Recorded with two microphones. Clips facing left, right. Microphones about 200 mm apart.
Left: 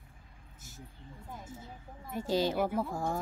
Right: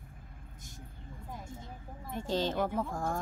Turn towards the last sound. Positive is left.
turn(degrees=5)  # may be behind; listen again after turning